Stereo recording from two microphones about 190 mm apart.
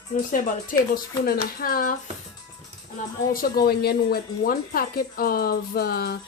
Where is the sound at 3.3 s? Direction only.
50° left (ahead or behind).